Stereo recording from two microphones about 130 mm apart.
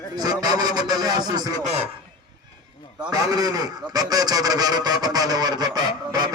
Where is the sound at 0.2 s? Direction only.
30° right (ahead or behind).